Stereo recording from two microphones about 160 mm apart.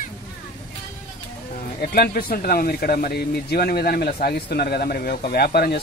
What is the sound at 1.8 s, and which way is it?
Speech, 70° left (ahead or behind).